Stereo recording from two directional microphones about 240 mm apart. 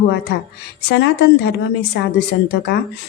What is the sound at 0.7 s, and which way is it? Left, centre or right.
A woman's voice, left.